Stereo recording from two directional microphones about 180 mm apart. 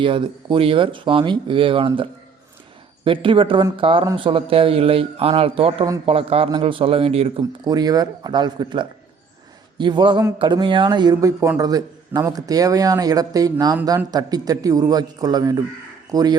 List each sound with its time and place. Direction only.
0.0 s speech: 25° right (ahead or behind)
3.0 s a man's voice: 30° right (ahead or behind)
7.6 s speech: 20° right (ahead or behind)